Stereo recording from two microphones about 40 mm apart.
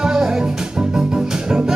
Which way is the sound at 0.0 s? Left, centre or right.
Centre.